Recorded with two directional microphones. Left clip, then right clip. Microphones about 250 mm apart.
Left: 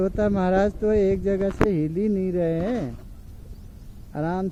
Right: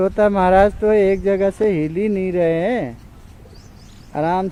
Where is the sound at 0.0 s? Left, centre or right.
Centre.